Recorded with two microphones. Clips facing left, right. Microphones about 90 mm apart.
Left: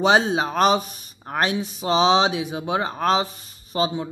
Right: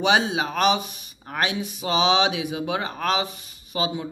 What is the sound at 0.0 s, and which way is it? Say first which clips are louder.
Speech: left 3 dB; 35° left (ahead or behind).